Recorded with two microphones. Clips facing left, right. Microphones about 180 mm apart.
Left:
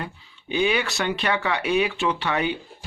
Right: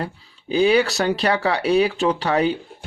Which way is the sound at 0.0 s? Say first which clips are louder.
Right 5 dB; 35° right (ahead or behind).